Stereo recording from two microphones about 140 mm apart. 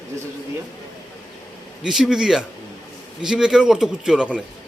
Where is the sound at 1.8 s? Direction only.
5° right (ahead or behind).